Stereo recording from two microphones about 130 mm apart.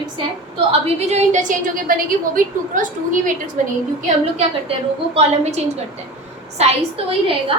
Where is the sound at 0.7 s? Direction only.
55° right (ahead or behind); by 3.5 s 85° right.